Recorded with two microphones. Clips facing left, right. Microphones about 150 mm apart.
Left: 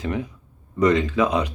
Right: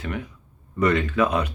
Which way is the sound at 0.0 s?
20° left (ahead or behind).